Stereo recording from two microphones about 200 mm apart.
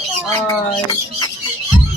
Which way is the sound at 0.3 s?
15° left (ahead or behind).